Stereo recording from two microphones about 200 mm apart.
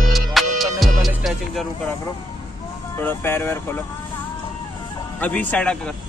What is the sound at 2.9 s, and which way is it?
Speech, 10° left (ahead or behind).